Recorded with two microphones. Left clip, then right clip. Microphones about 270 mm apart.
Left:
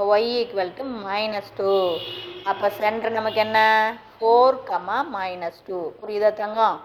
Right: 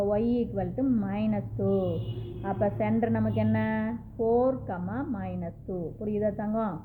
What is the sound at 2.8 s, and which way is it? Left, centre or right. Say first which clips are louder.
A woman's voice: left 7 dB; centre.